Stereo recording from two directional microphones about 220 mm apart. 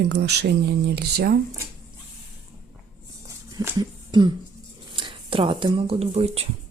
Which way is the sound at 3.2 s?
15° right (ahead or behind).